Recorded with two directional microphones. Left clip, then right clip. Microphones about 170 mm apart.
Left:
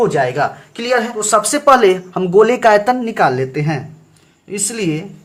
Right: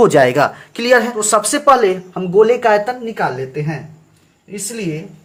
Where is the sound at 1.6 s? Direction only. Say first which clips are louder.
Left 1 dB; 5° left (ahead or behind).